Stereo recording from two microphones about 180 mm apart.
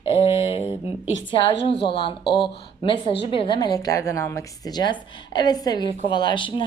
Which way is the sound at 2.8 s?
30° left (ahead or behind).